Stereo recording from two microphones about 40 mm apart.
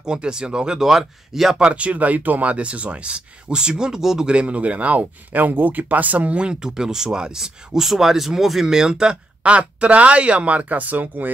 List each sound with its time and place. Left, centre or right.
0.0 s speech: right
0.7 s speech: centre
1.6 s speech: right
2.5 s speech: right; by 4.3 s centre
4.3 s speech: right
9.4 s speech: right